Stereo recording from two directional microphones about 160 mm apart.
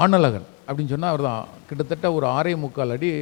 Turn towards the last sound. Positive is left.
turn(degrees=20)  # may be behind; listen again after turning